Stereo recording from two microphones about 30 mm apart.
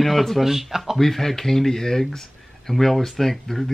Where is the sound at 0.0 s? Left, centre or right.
Centre.